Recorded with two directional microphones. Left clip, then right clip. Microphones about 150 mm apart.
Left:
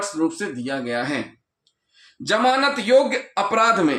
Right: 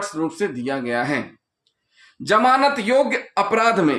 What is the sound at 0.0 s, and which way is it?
Speech, 40° right (ahead or behind).